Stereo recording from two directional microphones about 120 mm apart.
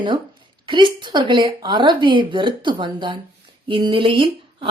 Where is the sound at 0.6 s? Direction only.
45° right (ahead or behind).